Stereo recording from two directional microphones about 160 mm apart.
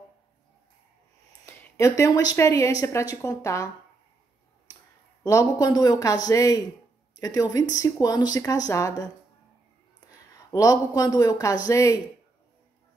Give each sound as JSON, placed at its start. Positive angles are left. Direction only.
{"t": 1.4, "sound": "speech", "side_deg": 20}
{"t": 5.2, "sound": "speech", "side_deg": 20}
{"t": 10.5, "sound": "speech", "side_deg": 20}